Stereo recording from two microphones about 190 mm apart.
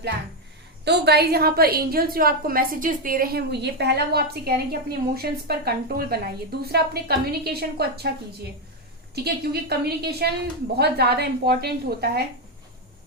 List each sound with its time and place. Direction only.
0.9 s a woman's voice: 60° right (ahead or behind)
9.1 s a woman's voice: 55° right (ahead or behind)